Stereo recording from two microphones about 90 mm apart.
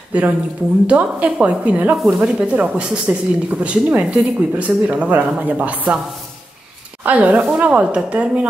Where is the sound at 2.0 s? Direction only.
5° right (ahead or behind).